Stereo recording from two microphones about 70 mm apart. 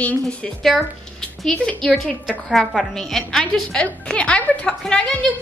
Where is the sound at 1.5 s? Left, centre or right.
Centre.